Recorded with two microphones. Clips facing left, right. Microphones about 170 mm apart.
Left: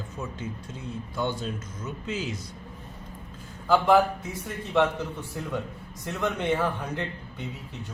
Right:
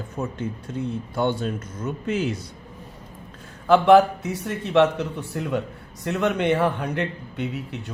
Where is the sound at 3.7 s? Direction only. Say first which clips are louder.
Right 6 dB; 75° right (ahead or behind).